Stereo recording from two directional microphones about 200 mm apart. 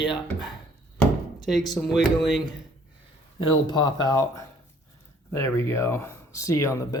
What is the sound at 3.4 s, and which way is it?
Speech, 20° left (ahead or behind).